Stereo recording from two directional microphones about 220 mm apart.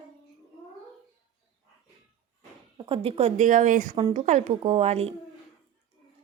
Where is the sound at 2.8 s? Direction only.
25° right (ahead or behind).